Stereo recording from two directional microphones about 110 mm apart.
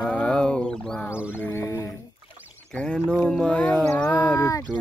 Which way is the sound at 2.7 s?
10° left (ahead or behind).